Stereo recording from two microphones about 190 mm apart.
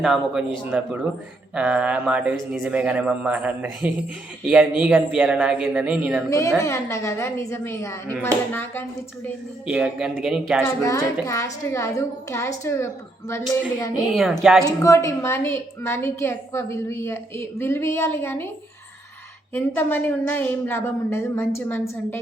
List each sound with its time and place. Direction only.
0.0 s a man's voice: centre (ahead or behind)
6.6 s a woman's voice: 15° left (ahead or behind)
9.6 s a man's voice: 5° right (ahead or behind)
10.8 s a woman's voice: 15° left (ahead or behind)
14.1 s a man's voice: centre (ahead or behind)
14.6 s a woman's voice: 15° left (ahead or behind)
19.5 s a woman's voice: 10° left (ahead or behind)